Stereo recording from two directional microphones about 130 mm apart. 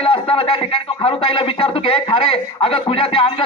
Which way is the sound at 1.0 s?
45° left (ahead or behind).